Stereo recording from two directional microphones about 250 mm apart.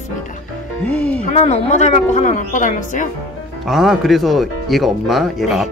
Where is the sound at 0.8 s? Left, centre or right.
Centre.